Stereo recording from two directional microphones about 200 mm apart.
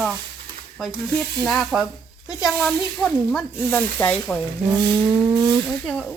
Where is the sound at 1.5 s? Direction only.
Centre (ahead or behind).